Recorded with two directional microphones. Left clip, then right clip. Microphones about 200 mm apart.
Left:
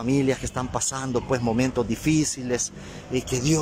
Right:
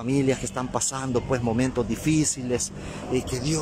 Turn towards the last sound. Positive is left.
turn(degrees=10)  # may be behind; listen again after turning